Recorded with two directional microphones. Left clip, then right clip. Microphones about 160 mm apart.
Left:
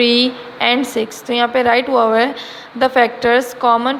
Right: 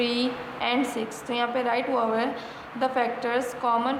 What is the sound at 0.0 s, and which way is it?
A woman's voice, 45° left (ahead or behind).